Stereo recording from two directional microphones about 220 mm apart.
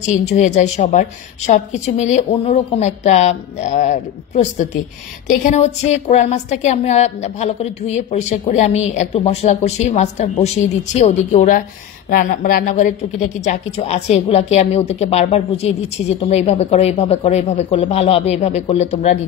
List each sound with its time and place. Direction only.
0.1 s a woman's voice: 30° left (ahead or behind)